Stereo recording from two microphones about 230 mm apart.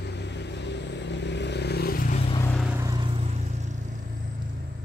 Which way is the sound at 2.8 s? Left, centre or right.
Centre.